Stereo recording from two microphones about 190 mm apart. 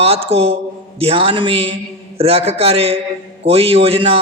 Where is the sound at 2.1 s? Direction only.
30° right (ahead or behind).